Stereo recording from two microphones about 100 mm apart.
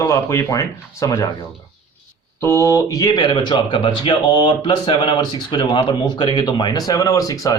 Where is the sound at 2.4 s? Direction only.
30° left (ahead or behind).